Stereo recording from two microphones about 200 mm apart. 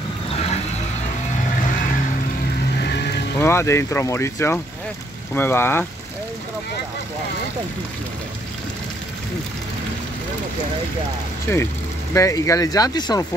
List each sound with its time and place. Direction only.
2.8 s vehicle: 55° left (ahead or behind)
3.3 s speech: 15° left (ahead or behind)
11.5 s speech: 10° left (ahead or behind)